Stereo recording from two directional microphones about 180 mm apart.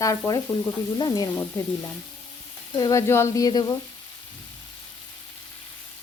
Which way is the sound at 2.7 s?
20° left (ahead or behind).